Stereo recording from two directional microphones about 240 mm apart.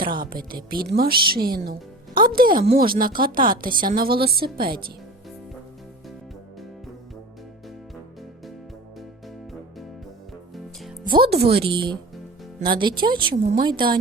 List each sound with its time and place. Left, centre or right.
0.3 s a woman's voice: right
11.0 s speech: right
11.3 s a woman's voice: right
11.7 s a woman's voice: centre